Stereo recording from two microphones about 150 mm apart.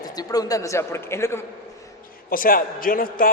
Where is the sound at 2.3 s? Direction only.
70° left (ahead or behind).